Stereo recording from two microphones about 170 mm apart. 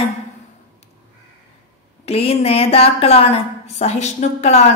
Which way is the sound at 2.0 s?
35° left (ahead or behind).